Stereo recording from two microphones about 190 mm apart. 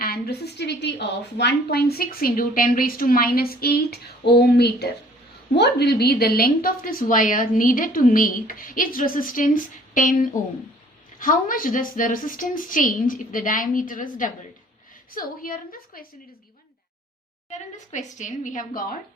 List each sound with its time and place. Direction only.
0.0 s a woman's voice: 55° left (ahead or behind)
17.5 s a woman's voice: 40° left (ahead or behind)